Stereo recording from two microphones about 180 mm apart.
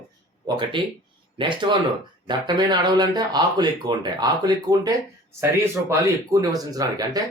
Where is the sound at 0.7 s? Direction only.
25° right (ahead or behind).